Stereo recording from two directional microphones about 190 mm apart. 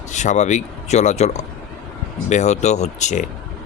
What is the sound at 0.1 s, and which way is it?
Speech, 40° left (ahead or behind).